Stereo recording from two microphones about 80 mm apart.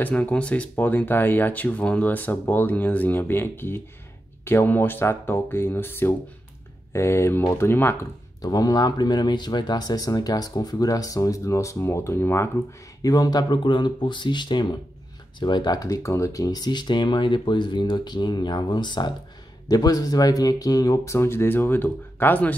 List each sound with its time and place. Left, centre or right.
0.0 s speech: centre; by 8.1 s left
8.4 s speech: left
13.0 s speech: left
19.7 s speech: left